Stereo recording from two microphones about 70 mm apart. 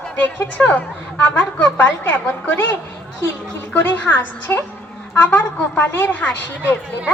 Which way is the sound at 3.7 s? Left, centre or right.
Left.